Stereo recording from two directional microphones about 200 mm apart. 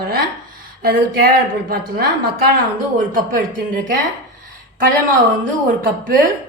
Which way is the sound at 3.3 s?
45° right (ahead or behind).